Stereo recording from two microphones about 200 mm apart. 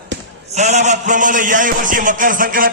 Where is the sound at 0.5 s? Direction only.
35° right (ahead or behind).